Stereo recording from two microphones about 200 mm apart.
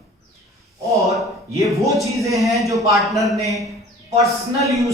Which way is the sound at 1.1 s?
Centre (ahead or behind).